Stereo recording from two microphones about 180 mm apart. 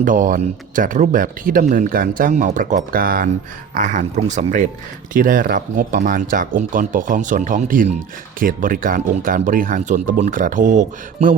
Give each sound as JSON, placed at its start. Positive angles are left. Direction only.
{"t": 0.0, "sound": "speech", "side_deg": -45}